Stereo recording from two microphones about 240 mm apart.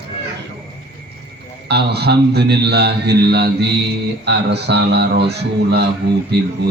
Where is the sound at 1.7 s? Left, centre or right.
Right.